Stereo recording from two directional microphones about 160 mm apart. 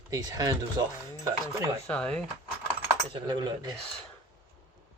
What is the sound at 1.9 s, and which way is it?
Speech, 5° left (ahead or behind).